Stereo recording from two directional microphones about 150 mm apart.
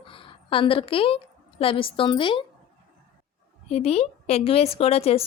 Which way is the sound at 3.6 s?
45° left (ahead or behind).